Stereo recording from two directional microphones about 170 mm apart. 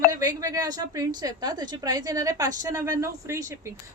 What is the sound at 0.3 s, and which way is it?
A woman's voice, 20° right (ahead or behind).